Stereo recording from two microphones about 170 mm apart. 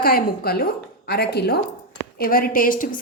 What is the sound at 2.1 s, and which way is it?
Speech, 60° left (ahead or behind).